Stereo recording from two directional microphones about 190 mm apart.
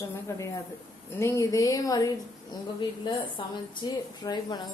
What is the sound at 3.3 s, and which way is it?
A woman's voice, 20° left (ahead or behind).